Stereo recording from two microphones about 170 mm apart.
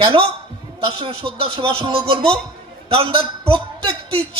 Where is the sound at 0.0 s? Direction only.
30° right (ahead or behind).